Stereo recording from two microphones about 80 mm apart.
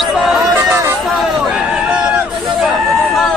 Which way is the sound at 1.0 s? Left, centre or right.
Centre.